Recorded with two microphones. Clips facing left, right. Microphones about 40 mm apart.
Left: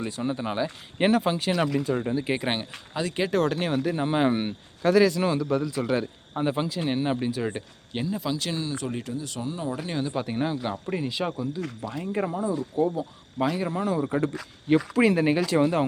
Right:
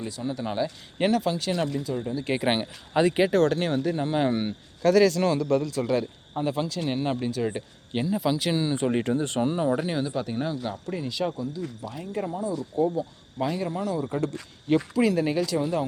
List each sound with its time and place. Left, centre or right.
0.0 s speech: left
1.8 s speech: left
2.4 s speech: centre
2.9 s speech: right
3.3 s speech: centre
6.3 s speech: left; by 8.0 s centre
8.0 s speech: centre
8.4 s speech: right
10.1 s speech: centre
12.8 s speech: centre; by 15.4 s left
15.4 s speech: left